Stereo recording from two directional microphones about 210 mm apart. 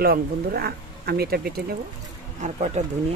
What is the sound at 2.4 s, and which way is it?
Speech, 35° right (ahead or behind).